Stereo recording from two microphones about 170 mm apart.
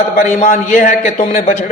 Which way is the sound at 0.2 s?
45° left (ahead or behind).